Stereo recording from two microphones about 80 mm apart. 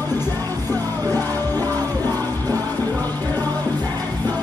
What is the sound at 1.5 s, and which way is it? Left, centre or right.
Music, left.